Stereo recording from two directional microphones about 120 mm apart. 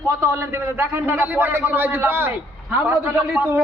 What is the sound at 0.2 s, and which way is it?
A man's voice, 20° right (ahead or behind).